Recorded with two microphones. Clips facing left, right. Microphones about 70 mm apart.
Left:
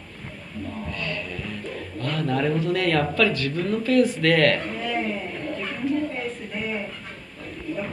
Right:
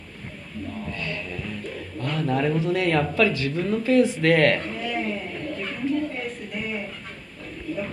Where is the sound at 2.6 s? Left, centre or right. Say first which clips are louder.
Even; right.